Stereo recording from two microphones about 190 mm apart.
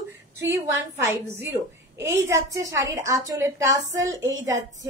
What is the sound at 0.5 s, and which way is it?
A woman's voice, 15° right (ahead or behind).